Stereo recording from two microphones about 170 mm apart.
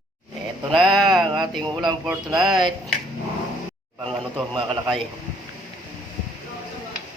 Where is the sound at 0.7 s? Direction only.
30° right (ahead or behind).